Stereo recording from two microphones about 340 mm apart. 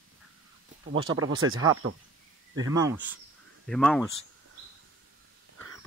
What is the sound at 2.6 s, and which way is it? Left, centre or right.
Speech, centre.